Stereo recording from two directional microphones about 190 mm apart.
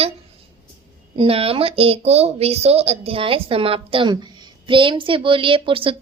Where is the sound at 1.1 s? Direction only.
30° right (ahead or behind).